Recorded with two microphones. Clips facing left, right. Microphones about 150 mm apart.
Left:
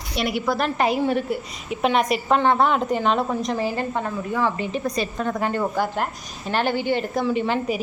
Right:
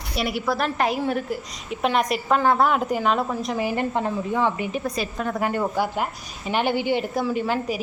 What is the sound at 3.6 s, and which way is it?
A woman's voice, 15° right (ahead or behind).